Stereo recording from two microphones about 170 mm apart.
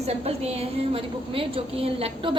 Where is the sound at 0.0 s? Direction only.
40° right (ahead or behind).